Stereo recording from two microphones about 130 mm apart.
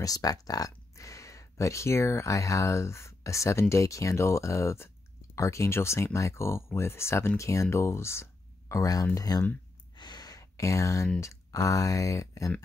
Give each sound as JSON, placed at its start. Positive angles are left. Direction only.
{"t": 0.0, "sound": "speech", "side_deg": 30}
{"t": 9.9, "sound": "sigh", "side_deg": 35}
{"t": 11.1, "sound": "speech", "side_deg": 25}